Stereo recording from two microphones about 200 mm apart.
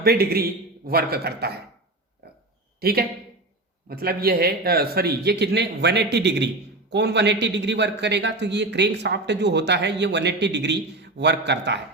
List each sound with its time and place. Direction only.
0.0 s speech: 50° right (ahead or behind)
2.8 s a man's voice: 50° right (ahead or behind)